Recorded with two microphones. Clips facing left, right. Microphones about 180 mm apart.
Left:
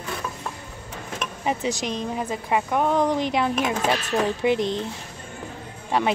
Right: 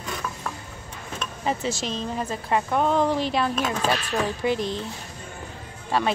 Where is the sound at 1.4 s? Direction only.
15° left (ahead or behind).